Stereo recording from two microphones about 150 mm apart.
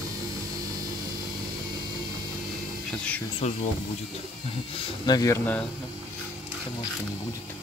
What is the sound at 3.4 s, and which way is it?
Speech, 50° left (ahead or behind).